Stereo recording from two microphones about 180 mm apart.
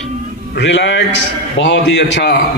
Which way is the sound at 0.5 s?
80° left.